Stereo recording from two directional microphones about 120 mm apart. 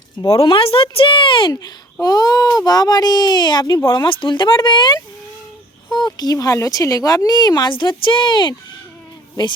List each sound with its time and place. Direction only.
0.3 s speech: 50° left (ahead or behind)
1.5 s a child's voice: 35° left (ahead or behind)